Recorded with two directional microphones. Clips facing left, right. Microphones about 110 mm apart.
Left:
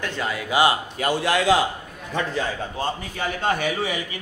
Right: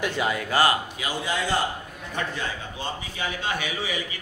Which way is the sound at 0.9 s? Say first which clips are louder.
Left 7 dB; 60° left (ahead or behind).